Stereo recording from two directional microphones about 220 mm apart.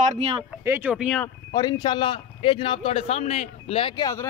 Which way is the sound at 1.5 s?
15° left (ahead or behind).